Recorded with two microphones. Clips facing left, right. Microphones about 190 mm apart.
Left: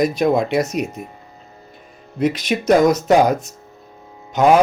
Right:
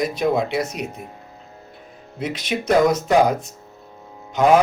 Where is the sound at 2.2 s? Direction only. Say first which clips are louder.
Left 6 dB; 40° left (ahead or behind).